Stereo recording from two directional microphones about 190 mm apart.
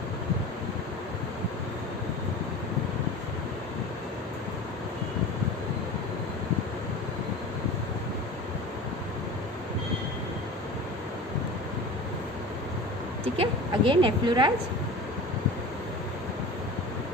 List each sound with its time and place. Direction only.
13.3 s a woman's voice: 30° right (ahead or behind)